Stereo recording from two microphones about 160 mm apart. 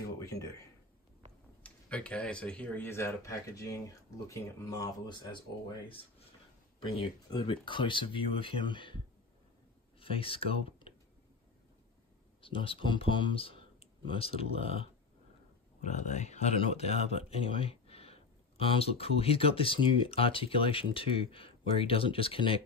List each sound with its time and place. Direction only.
0.2 s speech: 20° left (ahead or behind)
1.6 s speech: 10° left (ahead or behind); by 6.2 s 30° left (ahead or behind)
7.2 s speech: 30° left (ahead or behind)
12.4 s speech: 35° left (ahead or behind)